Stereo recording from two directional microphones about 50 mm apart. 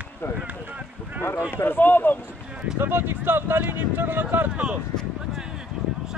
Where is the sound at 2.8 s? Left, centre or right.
Right.